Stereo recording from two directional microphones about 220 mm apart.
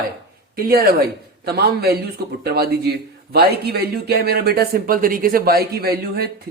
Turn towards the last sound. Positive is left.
turn(degrees=-45)  # may be behind; listen again after turning